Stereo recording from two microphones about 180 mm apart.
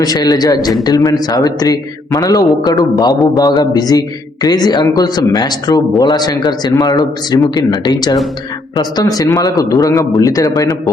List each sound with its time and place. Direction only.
0.0 s a man's voice: 20° left (ahead or behind)